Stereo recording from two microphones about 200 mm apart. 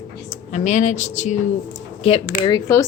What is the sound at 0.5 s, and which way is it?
A woman's voice, 35° left (ahead or behind).